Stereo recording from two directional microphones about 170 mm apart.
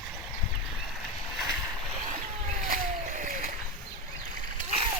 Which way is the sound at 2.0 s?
45° right (ahead or behind).